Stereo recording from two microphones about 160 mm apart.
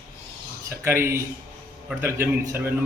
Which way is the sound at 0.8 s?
15° right (ahead or behind).